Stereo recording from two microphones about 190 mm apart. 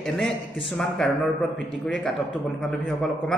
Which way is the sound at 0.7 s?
Centre (ahead or behind).